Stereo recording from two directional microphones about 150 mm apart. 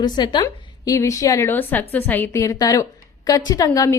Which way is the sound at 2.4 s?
25° left (ahead or behind).